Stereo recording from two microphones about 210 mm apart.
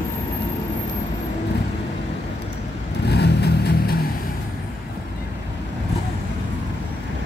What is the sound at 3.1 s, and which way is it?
Vehicle, 50° left (ahead or behind).